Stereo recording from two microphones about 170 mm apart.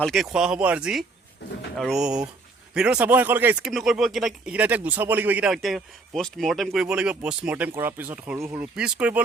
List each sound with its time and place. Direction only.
0.0 s speech: centre (ahead or behind)
1.4 s a sound: 80° left
1.8 s speech: centre (ahead or behind)